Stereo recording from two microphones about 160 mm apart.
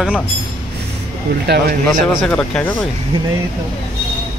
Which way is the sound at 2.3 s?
5° left (ahead or behind).